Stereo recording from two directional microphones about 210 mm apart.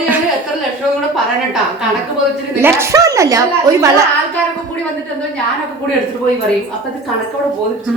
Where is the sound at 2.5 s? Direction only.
10° right (ahead or behind).